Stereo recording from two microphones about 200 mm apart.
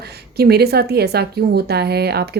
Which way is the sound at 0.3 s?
50° right (ahead or behind).